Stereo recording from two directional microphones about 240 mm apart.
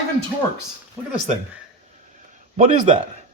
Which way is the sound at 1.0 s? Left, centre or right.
Centre.